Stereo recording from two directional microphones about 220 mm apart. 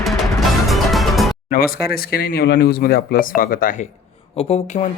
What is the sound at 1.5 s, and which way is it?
Speech, 40° left (ahead or behind).